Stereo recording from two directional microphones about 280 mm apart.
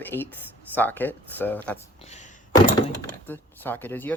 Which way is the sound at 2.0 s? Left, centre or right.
Left.